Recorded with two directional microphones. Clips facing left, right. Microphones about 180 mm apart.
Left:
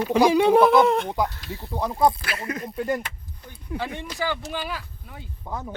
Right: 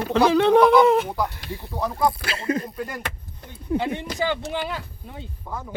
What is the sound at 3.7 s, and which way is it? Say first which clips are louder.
Speech: right 6 dB; 25° right (ahead or behind).